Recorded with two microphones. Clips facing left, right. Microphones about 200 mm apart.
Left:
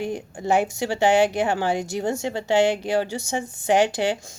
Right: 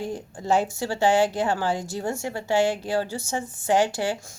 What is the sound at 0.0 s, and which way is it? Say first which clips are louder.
A woman's voice: left 3 dB; 15° left (ahead or behind).